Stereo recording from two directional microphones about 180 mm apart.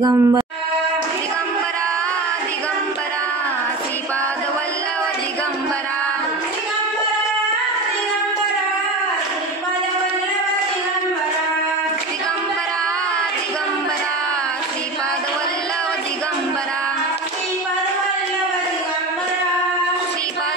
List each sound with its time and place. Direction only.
0.0 s speech: 20° right (ahead or behind)